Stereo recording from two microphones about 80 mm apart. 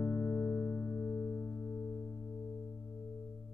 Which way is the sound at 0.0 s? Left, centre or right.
Left.